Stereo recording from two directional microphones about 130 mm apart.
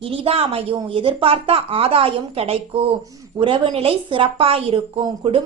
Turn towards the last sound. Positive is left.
turn(degrees=-45)  # may be behind; listen again after turning